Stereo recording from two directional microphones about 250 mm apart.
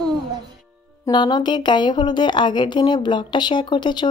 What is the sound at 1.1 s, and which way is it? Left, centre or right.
A woman's voice, centre.